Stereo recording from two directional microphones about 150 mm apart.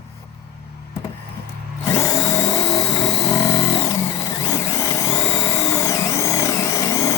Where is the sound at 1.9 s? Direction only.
20° left (ahead or behind).